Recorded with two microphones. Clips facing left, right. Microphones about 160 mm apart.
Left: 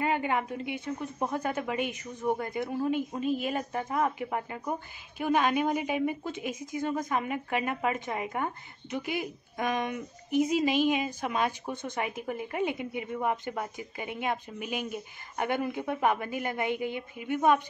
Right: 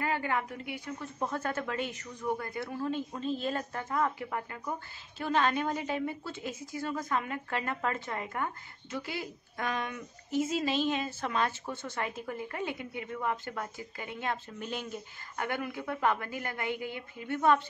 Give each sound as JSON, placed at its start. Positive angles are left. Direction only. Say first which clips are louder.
{"t": 0.0, "sound": "a woman's voice", "louder": "left 3 dB", "side_deg": 20}